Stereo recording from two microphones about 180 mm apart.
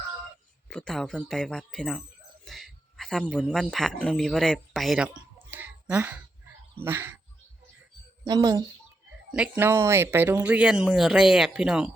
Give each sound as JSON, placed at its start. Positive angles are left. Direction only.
{"t": 0.7, "sound": "speech", "side_deg": 5}
{"t": 8.2, "sound": "a woman's voice", "side_deg": -20}
{"t": 9.3, "sound": "speech", "side_deg": -10}